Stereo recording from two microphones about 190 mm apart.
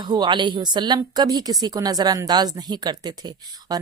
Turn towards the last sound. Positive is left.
turn(degrees=-20)  # may be behind; listen again after turning